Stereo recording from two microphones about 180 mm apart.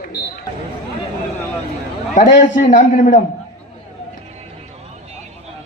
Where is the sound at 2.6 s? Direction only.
40° left (ahead or behind).